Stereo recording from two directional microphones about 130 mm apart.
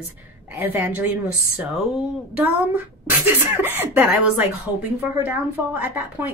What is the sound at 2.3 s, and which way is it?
Speech, 15° right (ahead or behind).